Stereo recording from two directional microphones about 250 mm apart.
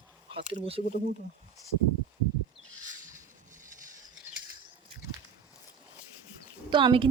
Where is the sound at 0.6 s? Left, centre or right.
Right.